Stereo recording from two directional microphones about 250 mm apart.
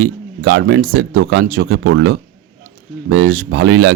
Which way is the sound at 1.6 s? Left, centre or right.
Right.